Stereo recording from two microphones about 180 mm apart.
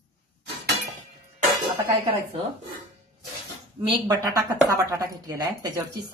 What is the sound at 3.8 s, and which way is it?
Speech, 20° right (ahead or behind).